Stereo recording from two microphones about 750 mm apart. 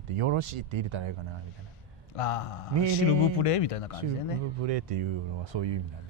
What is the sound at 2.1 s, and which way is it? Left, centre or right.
Speech, left.